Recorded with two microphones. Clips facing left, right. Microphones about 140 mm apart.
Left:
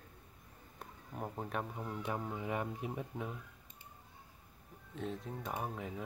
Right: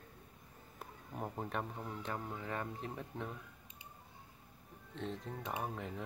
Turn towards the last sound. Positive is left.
turn(degrees=0)  # may be behind; listen again after turning